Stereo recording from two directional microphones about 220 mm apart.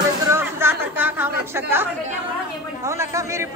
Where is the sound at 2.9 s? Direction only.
10° right (ahead or behind).